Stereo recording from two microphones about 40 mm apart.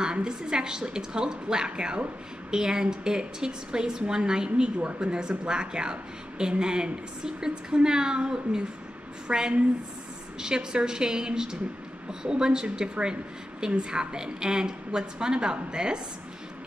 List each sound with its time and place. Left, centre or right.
0.0 s a woman's voice: right